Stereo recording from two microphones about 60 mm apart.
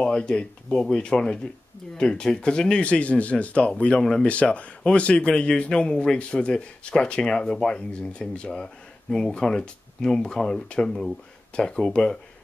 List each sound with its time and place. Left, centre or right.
0.0 s a man's voice: centre
4.0 s a man's voice: centre
4.3 s a man's voice: left